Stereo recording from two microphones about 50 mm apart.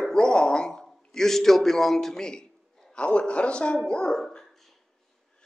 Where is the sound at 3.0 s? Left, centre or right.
Left.